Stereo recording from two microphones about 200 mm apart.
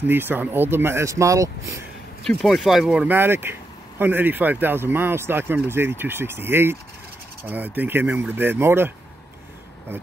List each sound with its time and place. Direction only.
0.0 s speech: 10° right (ahead or behind)
2.2 s speech: centre (ahead or behind)